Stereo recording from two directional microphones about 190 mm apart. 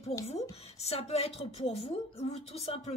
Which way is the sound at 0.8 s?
35° left (ahead or behind).